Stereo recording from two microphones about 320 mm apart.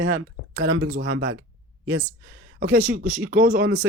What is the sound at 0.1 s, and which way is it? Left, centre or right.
Speech, right.